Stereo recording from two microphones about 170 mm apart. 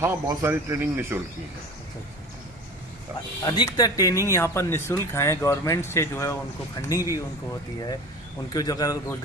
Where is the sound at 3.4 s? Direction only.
25° left (ahead or behind).